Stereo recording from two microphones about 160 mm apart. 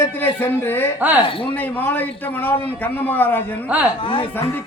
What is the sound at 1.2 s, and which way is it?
Speech, 35° left (ahead or behind).